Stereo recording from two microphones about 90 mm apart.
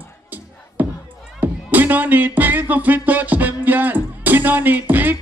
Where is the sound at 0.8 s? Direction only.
20° right (ahead or behind).